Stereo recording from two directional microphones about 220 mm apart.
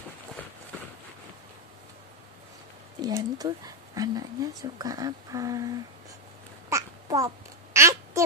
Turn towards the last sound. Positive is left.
turn(degrees=-15)  # may be behind; listen again after turning